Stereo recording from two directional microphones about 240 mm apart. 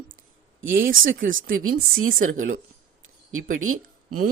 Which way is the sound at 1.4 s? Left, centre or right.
Right.